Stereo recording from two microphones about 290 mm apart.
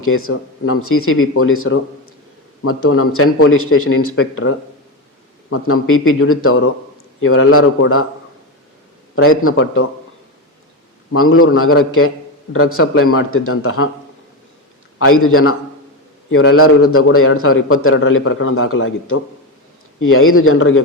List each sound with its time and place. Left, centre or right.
0.0 s a man's voice: left
9.4 s a man's voice: left
11.1 s a man's voice: left
14.9 s a man's voice: left